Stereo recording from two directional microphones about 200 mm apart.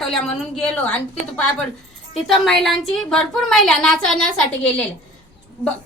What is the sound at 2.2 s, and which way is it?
A woman's voice, centre (ahead or behind).